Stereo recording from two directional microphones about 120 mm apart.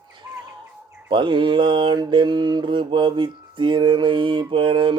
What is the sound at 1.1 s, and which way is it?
Mantra, 40° right (ahead or behind).